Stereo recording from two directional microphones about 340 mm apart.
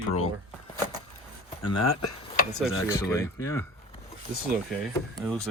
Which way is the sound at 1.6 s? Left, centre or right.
Left.